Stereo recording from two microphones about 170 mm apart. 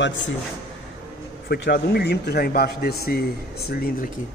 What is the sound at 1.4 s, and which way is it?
A man's voice, 80° left.